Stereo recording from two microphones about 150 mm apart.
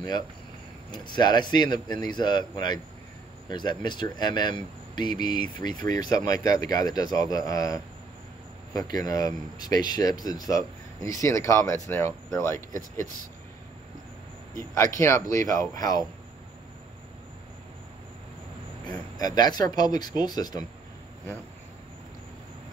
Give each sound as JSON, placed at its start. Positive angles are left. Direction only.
{"t": 0.9, "sound": "speech", "side_deg": 30}
{"t": 14.6, "sound": "speech", "side_deg": 20}
{"t": 18.9, "sound": "speech", "side_deg": 25}